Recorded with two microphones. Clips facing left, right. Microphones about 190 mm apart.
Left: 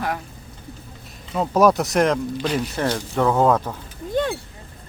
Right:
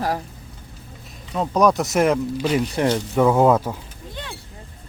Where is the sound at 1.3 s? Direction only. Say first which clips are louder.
Left 1 dB; 5° left (ahead or behind).